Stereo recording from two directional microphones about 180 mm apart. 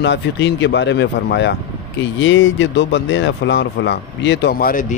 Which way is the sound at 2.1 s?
90° left.